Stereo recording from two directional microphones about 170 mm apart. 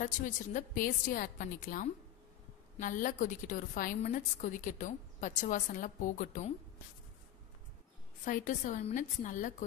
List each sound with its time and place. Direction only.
0.0 s a woman's voice: 50° left (ahead or behind)
8.3 s a woman's voice: 50° left (ahead or behind)